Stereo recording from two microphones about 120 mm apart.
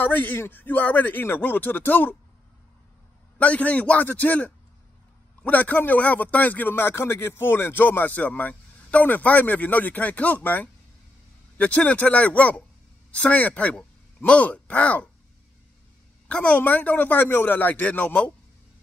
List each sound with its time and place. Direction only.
0.0 s a man's voice: 15° left (ahead or behind)
3.3 s a man's voice: 10° left (ahead or behind)
16.3 s a man's voice: 10° left (ahead or behind)